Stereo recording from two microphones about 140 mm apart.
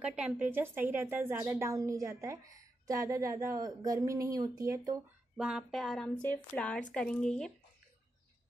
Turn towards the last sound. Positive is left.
turn(degrees=5)  # may be behind; listen again after turning